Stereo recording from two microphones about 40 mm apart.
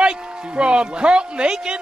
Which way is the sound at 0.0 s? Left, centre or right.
Right.